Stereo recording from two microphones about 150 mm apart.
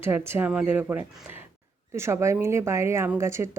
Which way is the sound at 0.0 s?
15° right (ahead or behind).